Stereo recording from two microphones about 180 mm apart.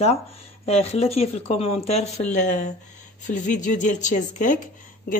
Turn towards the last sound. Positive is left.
turn(degrees=45)  # may be behind; listen again after turning